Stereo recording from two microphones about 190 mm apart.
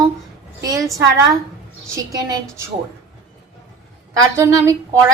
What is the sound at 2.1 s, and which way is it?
Speech, 20° right (ahead or behind).